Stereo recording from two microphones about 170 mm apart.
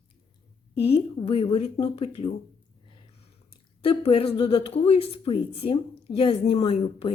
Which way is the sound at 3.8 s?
30° left (ahead or behind).